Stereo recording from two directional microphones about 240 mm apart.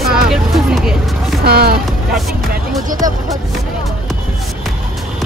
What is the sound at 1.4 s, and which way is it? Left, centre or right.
Speech, right.